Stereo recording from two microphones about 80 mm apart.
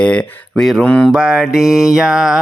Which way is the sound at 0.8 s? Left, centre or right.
Centre.